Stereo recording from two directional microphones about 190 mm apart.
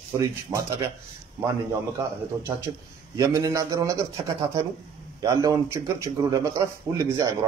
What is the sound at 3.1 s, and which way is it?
A man's voice, 15° right (ahead or behind).